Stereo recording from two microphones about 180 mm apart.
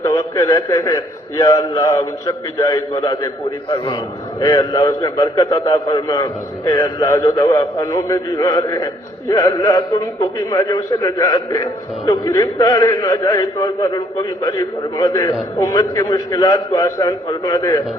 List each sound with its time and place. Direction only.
0.0 s a man's voice: 15° left (ahead or behind)
4.4 s a man's voice: 20° left (ahead or behind)